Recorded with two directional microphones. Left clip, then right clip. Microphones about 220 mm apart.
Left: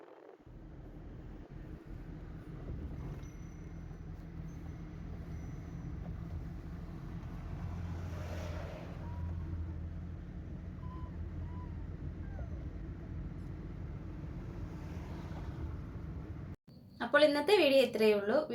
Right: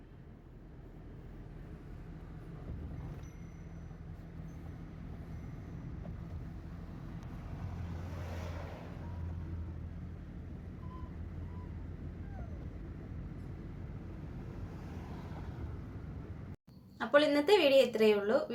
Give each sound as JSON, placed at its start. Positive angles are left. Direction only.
{"t": 8.4, "sound": "vehicle", "side_deg": 45}
{"t": 17.0, "sound": "a woman's voice", "side_deg": 0}